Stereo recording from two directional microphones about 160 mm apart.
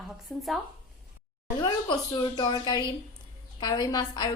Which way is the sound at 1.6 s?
30° left (ahead or behind).